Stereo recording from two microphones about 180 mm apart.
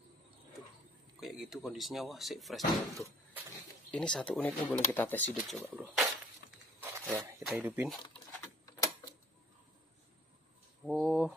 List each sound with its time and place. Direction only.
1.2 s speech: centre (ahead or behind)
5.6 s speech: 10° right (ahead or behind)
6.5 s a sound: 10° right (ahead or behind)
7.5 s speech: 10° right (ahead or behind)
8.6 s typewriter: 20° left (ahead or behind)
10.9 s a sound: centre (ahead or behind)